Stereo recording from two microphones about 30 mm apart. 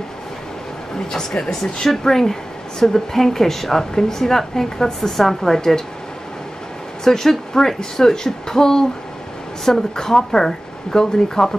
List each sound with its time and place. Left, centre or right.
1.1 s a woman's voice: left
7.1 s speech: centre